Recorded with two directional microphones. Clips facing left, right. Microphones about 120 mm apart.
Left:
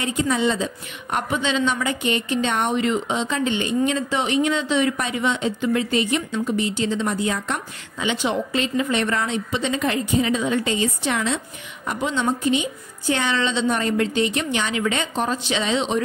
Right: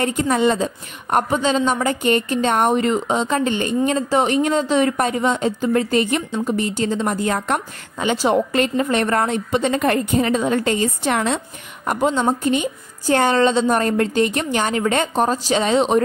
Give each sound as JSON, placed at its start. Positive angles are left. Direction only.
{"t": 0.0, "sound": "a woman's voice", "side_deg": -50}